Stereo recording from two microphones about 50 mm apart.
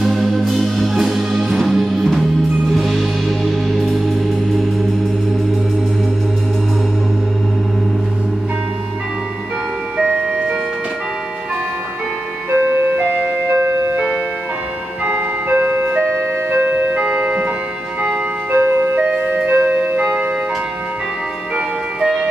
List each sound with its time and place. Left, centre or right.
0.0 s music: centre
12.4 s music: right
13.6 s music: right
15.0 s music: right
16.1 s music: right
16.6 s music: right
17.0 s organ: right
18.0 s music: right
18.7 s music: right
18.9 s music: right
21.5 s music: centre